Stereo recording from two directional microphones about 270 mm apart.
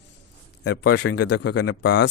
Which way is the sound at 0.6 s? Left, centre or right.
Left.